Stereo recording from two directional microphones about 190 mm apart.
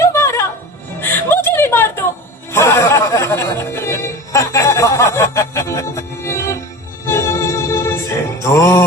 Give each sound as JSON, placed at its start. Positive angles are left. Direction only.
{"t": 0.0, "sound": "music", "side_deg": 15}